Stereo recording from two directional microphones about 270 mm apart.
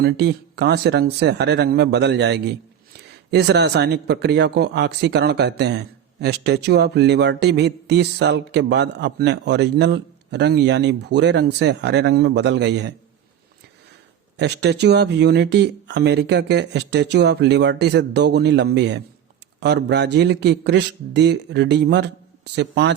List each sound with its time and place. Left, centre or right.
0.0 s speech: right
14.3 s speech: right